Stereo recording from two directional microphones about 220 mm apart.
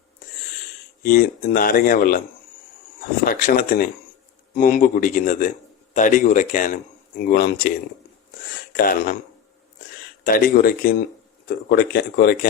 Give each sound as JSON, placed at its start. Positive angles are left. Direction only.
{"t": 1.0, "sound": "a man's voice", "side_deg": 40}
{"t": 3.2, "sound": "a man's voice", "side_deg": 40}
{"t": 8.7, "sound": "speech", "side_deg": 40}
{"t": 10.2, "sound": "a man's voice", "side_deg": 40}